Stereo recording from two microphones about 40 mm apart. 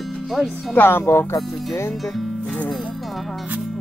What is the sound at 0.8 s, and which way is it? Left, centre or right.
Speech, left.